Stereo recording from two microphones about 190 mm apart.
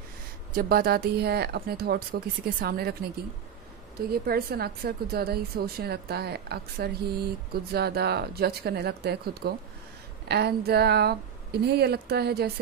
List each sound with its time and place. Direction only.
0.6 s a woman's voice: 55° right (ahead or behind)
4.1 s a woman's voice: 55° right (ahead or behind)